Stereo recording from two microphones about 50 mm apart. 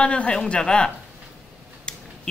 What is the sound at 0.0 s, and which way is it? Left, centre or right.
Speech, left.